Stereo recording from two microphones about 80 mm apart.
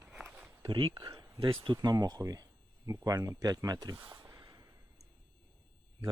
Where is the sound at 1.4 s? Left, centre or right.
Right.